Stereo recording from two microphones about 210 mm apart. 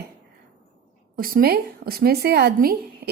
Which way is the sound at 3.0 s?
50° right (ahead or behind).